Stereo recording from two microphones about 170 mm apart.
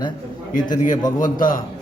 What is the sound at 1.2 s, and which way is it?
Speech, 55° left (ahead or behind).